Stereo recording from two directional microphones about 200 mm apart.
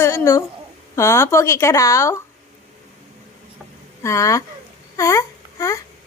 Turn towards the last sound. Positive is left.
turn(degrees=15)  # may be behind; listen again after turning